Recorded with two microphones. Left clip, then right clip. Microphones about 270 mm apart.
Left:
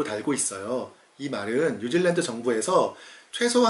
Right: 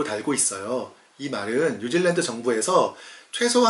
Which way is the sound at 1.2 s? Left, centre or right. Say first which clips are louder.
Right 2 dB; centre.